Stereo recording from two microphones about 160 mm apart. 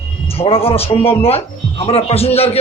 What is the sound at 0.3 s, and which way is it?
Speech, 35° left (ahead or behind).